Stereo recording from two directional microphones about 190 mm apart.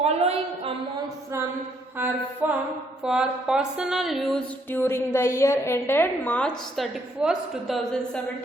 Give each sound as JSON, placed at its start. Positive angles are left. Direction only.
{"t": 0.0, "sound": "a woman's voice", "side_deg": -35}
{"t": 1.0, "sound": "mantra", "side_deg": -15}
{"t": 3.0, "sound": "music", "side_deg": -5}
{"t": 6.7, "sound": "a woman's voice", "side_deg": 0}